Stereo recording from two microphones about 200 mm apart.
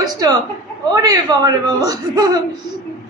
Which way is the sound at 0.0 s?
20° right (ahead or behind).